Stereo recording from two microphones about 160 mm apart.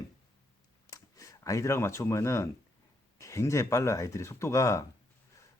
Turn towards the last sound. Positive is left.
turn(degrees=20)  # may be behind; listen again after turning